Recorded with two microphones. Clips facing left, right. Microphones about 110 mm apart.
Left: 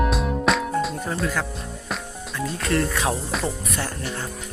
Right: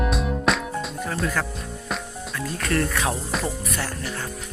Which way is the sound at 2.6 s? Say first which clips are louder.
Left 1 dB; 20° left (ahead or behind).